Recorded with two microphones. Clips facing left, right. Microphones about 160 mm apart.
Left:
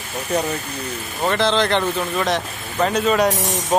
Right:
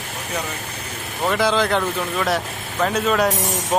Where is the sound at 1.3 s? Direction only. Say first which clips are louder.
Left 1 dB; 10° right (ahead or behind).